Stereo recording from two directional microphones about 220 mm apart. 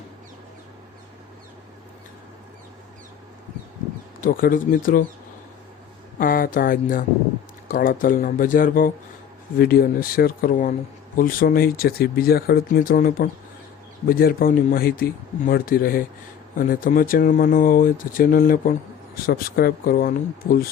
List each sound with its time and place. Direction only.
4.2 s speech: 40° left (ahead or behind)
6.1 s speech: 40° left (ahead or behind)